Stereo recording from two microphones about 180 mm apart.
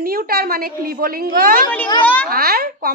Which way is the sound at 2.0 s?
10° left (ahead or behind).